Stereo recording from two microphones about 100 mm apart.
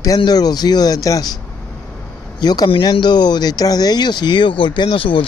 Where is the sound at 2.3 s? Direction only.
45° left (ahead or behind).